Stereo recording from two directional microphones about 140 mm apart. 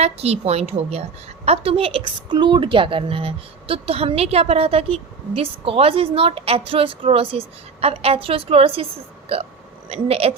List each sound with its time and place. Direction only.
0.0 s a woman's voice: 50° right (ahead or behind)